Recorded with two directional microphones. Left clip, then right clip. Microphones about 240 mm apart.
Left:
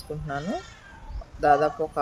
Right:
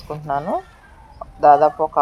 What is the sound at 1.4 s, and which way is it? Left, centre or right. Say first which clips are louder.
Speech: right 8 dB; centre.